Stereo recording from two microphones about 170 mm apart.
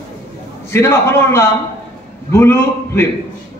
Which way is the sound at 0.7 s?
15° left (ahead or behind).